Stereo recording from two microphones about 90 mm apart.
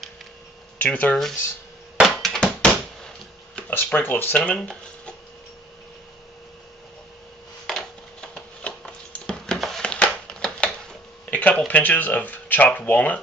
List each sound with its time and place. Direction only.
0.7 s speech: 15° left (ahead or behind)
2.0 s a sound: centre (ahead or behind)
3.7 s speech: 25° left (ahead or behind)
4.5 s speech: 10° left (ahead or behind)
7.6 s a sound: 5° left (ahead or behind)
11.2 s speech: 20° left (ahead or behind)